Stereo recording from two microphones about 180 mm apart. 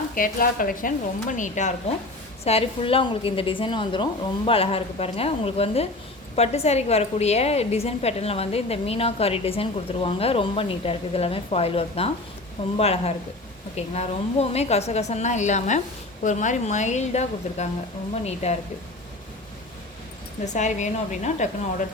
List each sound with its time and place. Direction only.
0.1 s a woman's voice: 50° left (ahead or behind)
20.4 s a woman's voice: 40° left (ahead or behind)